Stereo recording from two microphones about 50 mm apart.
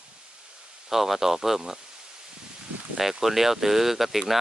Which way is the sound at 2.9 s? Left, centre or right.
Centre.